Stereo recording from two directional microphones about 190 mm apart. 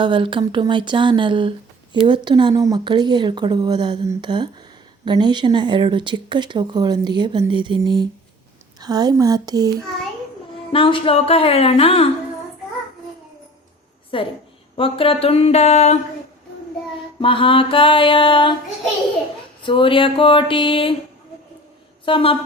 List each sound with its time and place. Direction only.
0.0 s speech: 25° right (ahead or behind)
10.7 s speech: 25° left (ahead or behind)
14.1 s music: 25° left (ahead or behind)
14.8 s speech: 30° left (ahead or behind)
17.2 s music: 25° left (ahead or behind)
19.6 s music: 25° left (ahead or behind)
22.0 s music: 30° left (ahead or behind)